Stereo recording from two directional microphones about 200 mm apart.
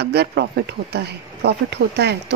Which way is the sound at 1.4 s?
55° right (ahead or behind).